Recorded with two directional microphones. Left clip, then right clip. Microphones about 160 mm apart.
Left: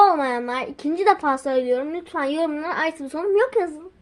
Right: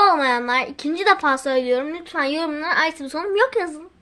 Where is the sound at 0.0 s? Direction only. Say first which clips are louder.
Right 1 dB; 5° left (ahead or behind).